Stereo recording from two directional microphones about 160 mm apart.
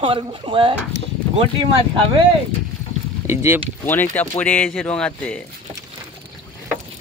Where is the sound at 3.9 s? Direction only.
10° left (ahead or behind).